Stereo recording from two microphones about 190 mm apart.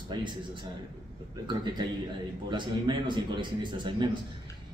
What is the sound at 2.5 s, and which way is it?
A man's voice, 25° right (ahead or behind).